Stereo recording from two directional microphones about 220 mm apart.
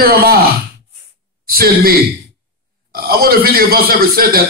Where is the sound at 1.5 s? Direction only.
45° right (ahead or behind).